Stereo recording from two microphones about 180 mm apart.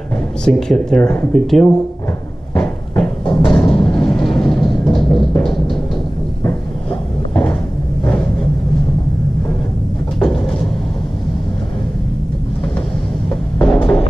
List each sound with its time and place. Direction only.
0.5 s speech: 5° left (ahead or behind)
2.5 s a sound: 5° left (ahead or behind)
3.4 s music: 5° left (ahead or behind)
6.4 s a sound: 5° left (ahead or behind)
10.1 s vehicle: 5° left (ahead or behind)
13.3 s music: 5° left (ahead or behind)